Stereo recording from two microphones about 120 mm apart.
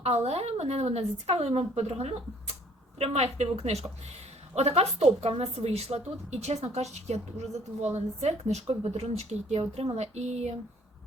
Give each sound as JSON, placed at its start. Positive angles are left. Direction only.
{"t": 0.0, "sound": "a woman's voice", "side_deg": -60}